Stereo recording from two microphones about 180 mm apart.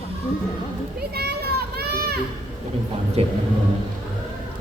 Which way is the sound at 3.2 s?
35° right (ahead or behind).